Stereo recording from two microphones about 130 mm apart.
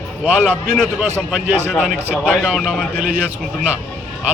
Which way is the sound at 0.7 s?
5° left (ahead or behind).